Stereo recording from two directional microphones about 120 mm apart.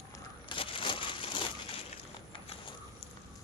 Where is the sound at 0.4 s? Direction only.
45° left (ahead or behind).